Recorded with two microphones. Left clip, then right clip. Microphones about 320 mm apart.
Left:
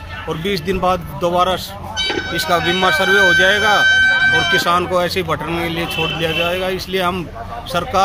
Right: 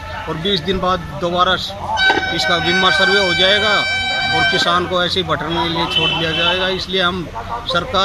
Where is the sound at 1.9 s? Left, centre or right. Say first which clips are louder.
Right 6 dB; centre.